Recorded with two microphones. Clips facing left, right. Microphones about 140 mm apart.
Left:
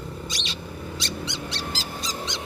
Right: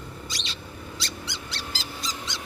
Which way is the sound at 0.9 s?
20° left (ahead or behind).